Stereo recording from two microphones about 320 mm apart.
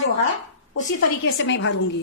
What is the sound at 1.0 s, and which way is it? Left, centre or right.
Speech, left.